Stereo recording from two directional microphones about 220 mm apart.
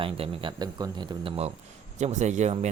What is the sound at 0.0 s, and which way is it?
Speech, 25° right (ahead or behind).